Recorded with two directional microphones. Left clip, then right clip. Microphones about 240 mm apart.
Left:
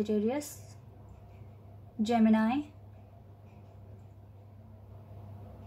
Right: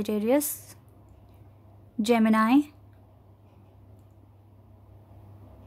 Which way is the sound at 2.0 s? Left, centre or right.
Right.